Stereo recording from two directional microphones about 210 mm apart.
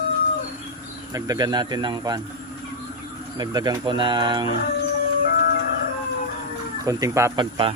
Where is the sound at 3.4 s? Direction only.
20° right (ahead or behind).